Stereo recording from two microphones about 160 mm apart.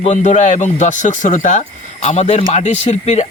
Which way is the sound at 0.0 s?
50° left (ahead or behind).